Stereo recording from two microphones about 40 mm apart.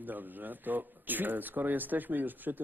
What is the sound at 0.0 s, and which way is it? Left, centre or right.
Speech, right.